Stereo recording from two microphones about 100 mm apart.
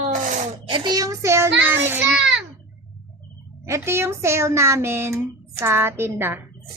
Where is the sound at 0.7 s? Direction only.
40° right (ahead or behind); by 2.0 s 20° right (ahead or behind).